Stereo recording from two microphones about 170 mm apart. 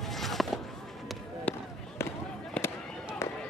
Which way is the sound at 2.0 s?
15° left (ahead or behind).